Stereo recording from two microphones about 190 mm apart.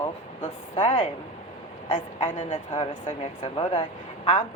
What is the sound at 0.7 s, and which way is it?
A woman's voice, 25° left (ahead or behind).